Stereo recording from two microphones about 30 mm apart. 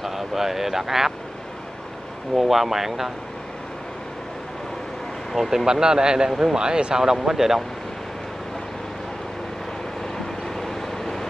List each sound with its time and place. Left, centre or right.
0.0 s speech: centre
2.3 s speech: centre
5.4 s a man's voice: centre
7.0 s speech: centre
10.1 s vehicle: centre